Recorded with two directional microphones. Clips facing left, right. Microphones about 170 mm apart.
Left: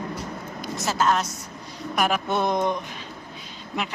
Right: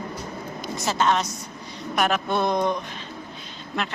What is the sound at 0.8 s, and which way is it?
Speech, 5° left (ahead or behind).